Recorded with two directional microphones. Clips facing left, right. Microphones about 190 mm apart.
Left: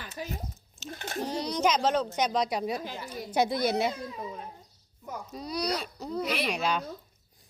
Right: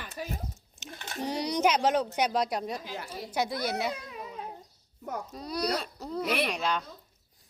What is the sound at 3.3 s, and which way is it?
Speech, 25° left (ahead or behind).